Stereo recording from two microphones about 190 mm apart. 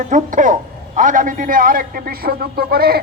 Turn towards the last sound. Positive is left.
turn(degrees=-55)  # may be behind; listen again after turning